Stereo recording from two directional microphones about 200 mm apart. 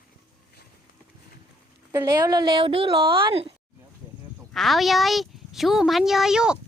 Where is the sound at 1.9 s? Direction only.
20° right (ahead or behind).